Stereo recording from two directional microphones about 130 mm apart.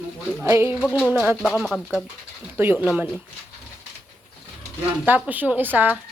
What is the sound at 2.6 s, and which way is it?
Speech, 15° right (ahead or behind).